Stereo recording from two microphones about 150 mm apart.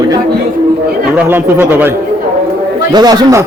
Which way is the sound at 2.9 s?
25° right (ahead or behind).